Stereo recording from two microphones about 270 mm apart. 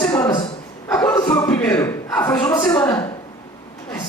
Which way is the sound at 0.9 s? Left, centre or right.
Centre.